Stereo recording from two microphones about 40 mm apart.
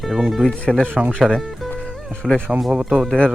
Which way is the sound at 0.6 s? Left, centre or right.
Left.